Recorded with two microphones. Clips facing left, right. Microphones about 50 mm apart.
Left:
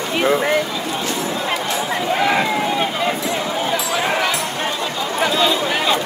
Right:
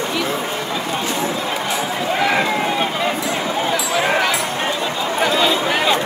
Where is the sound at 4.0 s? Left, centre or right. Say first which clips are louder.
Right 4 dB; centre.